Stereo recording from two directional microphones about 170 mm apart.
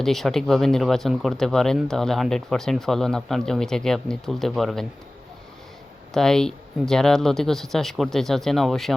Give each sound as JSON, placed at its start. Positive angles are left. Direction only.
{"t": 0.0, "sound": "speech", "side_deg": 0}
{"t": 6.1, "sound": "speech", "side_deg": 5}